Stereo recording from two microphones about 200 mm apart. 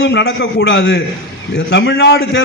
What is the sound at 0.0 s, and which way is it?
A man's voice, 60° left (ahead or behind).